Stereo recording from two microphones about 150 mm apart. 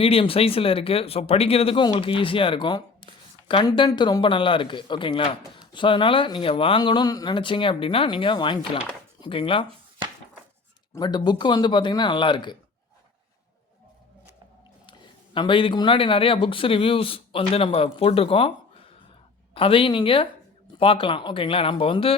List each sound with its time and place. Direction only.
0.0 s speech: 40° left (ahead or behind)
10.9 s speech: 30° left (ahead or behind)
14.8 s speech: 30° left (ahead or behind)
19.5 s speech: 35° left (ahead or behind)